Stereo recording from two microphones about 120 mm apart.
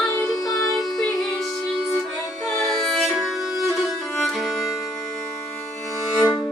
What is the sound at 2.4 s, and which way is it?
Music, centre (ahead or behind).